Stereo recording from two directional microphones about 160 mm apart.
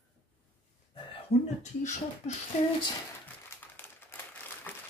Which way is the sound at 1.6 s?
50° left (ahead or behind).